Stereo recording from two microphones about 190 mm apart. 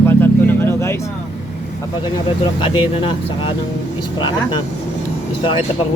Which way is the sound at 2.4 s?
25° left (ahead or behind).